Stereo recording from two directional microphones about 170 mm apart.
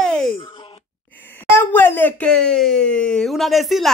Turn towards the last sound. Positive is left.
turn(degrees=0)  # may be behind; listen again after turning